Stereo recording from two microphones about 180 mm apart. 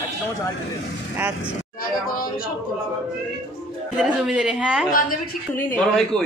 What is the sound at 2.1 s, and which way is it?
Speech, 50° left (ahead or behind).